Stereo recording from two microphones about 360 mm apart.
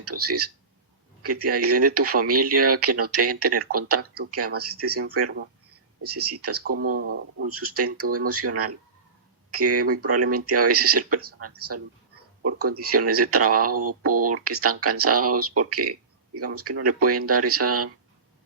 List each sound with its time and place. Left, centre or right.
0.0 s speech: right
6.6 s speech: right